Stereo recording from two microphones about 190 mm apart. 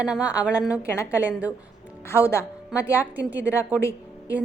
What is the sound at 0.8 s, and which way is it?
Speech, 15° left (ahead or behind).